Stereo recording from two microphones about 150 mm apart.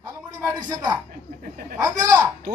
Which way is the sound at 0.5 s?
25° right (ahead or behind).